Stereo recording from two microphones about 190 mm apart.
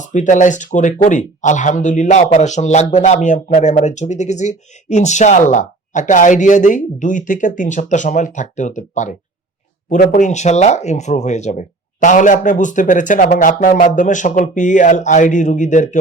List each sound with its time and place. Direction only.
0.0 s speech: 40° left (ahead or behind)